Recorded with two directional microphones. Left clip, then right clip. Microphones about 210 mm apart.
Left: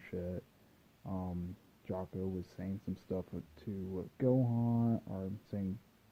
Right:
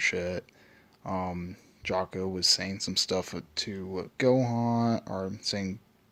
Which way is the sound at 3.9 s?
10° right (ahead or behind).